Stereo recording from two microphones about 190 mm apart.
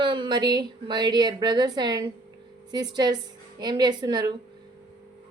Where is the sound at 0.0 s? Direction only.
25° right (ahead or behind).